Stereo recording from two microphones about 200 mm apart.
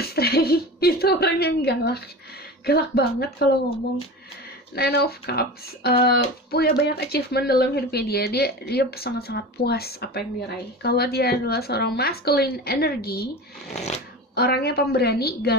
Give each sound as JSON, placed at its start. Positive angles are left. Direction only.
{"t": 0.0, "sound": "a sound", "side_deg": 50}
{"t": 2.6, "sound": "speech", "side_deg": 50}
{"t": 4.7, "sound": "speech", "side_deg": 50}
{"t": 14.3, "sound": "speech", "side_deg": 50}